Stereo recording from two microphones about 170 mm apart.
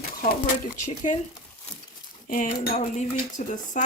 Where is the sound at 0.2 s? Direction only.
50° left (ahead or behind).